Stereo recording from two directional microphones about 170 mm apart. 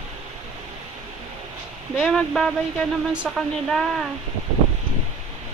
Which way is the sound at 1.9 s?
Centre (ahead or behind).